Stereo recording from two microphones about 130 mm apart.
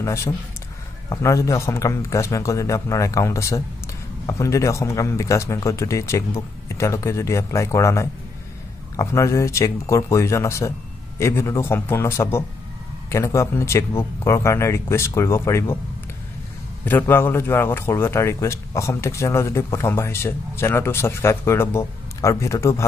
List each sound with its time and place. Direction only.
0.0 s a man's voice: 20° left (ahead or behind)
17.0 s a man's voice: 20° left (ahead or behind)